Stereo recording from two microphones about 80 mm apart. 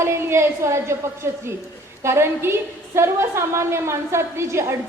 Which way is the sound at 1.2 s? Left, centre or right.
Right.